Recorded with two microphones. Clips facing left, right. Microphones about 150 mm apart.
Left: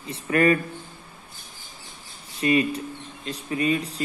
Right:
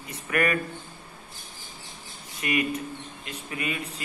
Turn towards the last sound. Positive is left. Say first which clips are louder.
# left 8 dB
turn(degrees=35)  # may be behind; listen again after turning